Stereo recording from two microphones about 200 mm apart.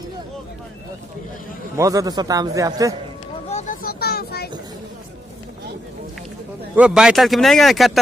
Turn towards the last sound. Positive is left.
turn(degrees=0)  # may be behind; listen again after turning